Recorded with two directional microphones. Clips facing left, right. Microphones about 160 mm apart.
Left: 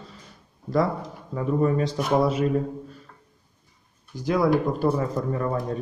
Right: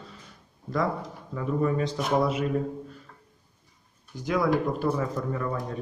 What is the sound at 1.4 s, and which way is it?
A man's voice, 40° left (ahead or behind).